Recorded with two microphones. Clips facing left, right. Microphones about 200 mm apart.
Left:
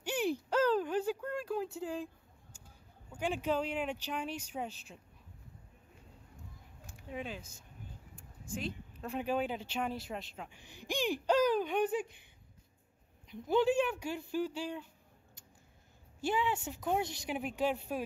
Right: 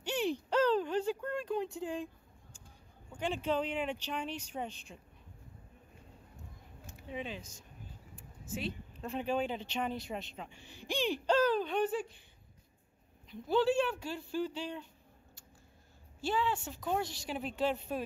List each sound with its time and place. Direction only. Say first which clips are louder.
0.0 s a sound: even; 10° left (ahead or behind)
3.1 s speech: even; 10° left (ahead or behind)
7.0 s speech: right 1 dB; centre (ahead or behind)
8.2 s a sound: right 1 dB; centre (ahead or behind)
9.1 s speech: even; 10° left (ahead or behind)
10.5 s speech: even; 15° left (ahead or behind)
13.3 s speech: even; 20° left (ahead or behind)
16.2 s speech: even; 15° left (ahead or behind)